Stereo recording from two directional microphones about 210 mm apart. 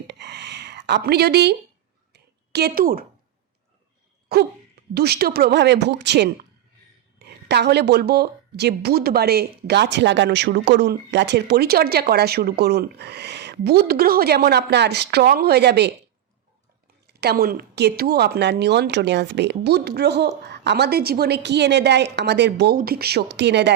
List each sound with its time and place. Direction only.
0.1 s a sound: 55° right (ahead or behind)
4.3 s a woman's voice: 50° right (ahead or behind)
17.1 s a woman's voice: 50° right (ahead or behind)